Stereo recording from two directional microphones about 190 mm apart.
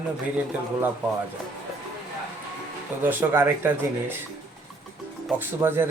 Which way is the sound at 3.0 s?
10° right (ahead or behind).